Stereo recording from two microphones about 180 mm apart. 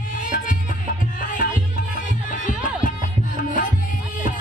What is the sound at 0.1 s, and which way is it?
Music, 45° left (ahead or behind).